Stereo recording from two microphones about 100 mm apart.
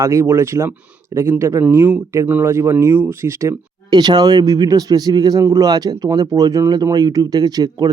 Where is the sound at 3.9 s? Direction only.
45° right (ahead or behind).